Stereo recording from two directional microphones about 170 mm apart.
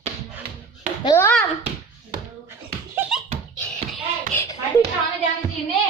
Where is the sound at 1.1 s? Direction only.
10° left (ahead or behind).